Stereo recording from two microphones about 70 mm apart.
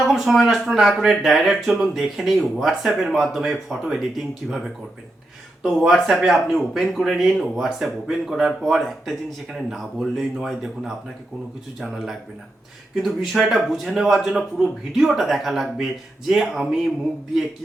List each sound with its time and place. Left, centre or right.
0.0 s speech: centre
5.8 s speech: centre